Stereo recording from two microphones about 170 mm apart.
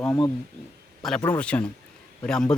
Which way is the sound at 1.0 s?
5° left (ahead or behind).